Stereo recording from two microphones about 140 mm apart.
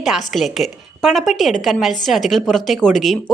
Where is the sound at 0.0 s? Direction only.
Centre (ahead or behind).